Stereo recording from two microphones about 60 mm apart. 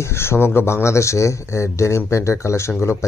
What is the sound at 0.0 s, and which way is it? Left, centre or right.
Speech, left.